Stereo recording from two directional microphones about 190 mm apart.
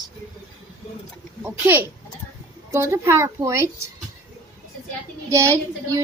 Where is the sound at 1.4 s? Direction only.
10° right (ahead or behind).